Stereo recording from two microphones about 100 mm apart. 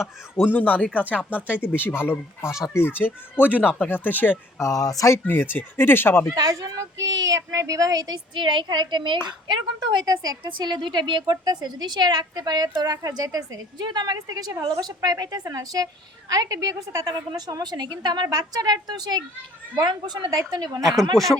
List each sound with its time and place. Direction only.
0.3 s speech: 15° left (ahead or behind)
1.4 s speech: 15° right (ahead or behind)
1.8 s speech: 20° left (ahead or behind)
4.6 s speech: 35° left (ahead or behind)
5.2 s speech: 20° left (ahead or behind)
6.3 s a woman's voice: 40° right (ahead or behind)
8.4 s speech: 50° right (ahead or behind)
20.8 s speech: centre (ahead or behind)